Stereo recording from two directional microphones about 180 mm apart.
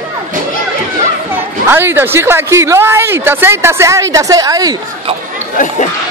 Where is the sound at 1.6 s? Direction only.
10° right (ahead or behind).